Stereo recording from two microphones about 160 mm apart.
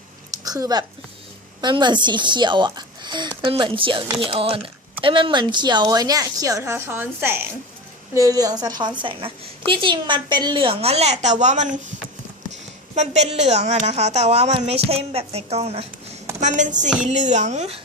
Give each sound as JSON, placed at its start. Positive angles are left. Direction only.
{"t": 0.4, "sound": "a woman's voice", "side_deg": -25}
{"t": 12.9, "sound": "a woman's voice", "side_deg": -45}